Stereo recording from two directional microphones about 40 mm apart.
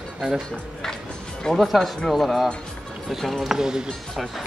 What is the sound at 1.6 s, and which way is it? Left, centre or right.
Speech, centre.